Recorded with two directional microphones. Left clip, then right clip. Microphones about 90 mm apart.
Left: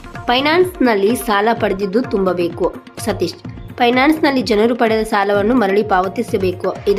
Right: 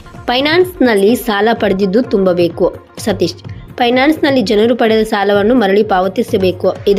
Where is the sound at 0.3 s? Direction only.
50° right (ahead or behind).